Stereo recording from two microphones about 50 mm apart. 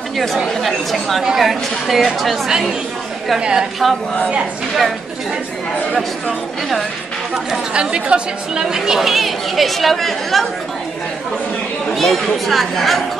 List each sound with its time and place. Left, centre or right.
0.2 s a woman's voice: centre
3.3 s speech: centre
5.9 s a woman's voice: centre
7.7 s a woman's voice: centre
11.9 s a woman's voice: centre